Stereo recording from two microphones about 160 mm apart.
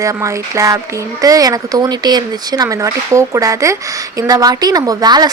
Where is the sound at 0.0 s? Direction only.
20° right (ahead or behind).